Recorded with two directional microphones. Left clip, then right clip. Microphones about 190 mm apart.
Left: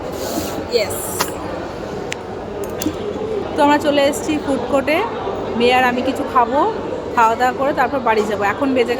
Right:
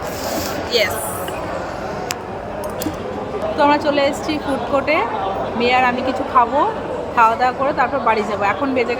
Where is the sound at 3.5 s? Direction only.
15° left (ahead or behind).